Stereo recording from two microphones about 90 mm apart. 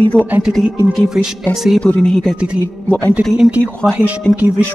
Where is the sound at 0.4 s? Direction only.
Centre (ahead or behind).